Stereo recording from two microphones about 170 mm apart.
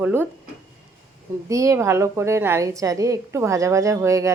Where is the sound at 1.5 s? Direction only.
20° right (ahead or behind).